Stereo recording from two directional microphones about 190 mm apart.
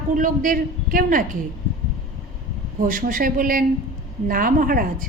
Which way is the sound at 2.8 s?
45° right (ahead or behind).